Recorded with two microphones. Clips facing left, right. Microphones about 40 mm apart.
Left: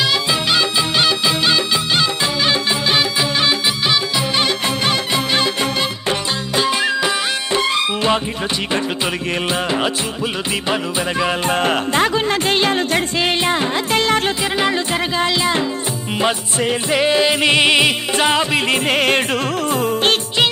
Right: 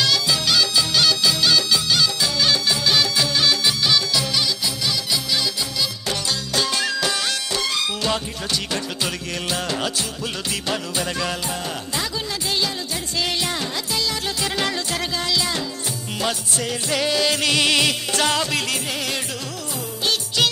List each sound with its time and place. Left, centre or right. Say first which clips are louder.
0.0 s music: left 3 dB; left
4.4 s music: left 6 dB; left
6.5 s music: left 6 dB; left
9.5 s music: left 4 dB; left
11.4 s music: left 11 dB; left
13.2 s music: left 3 dB; left
14.6 s music: left 7 dB; left
18.9 s music: left 11 dB; left